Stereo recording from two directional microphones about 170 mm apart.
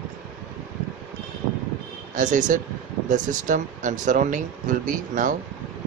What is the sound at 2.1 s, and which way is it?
Speech, 50° right (ahead or behind).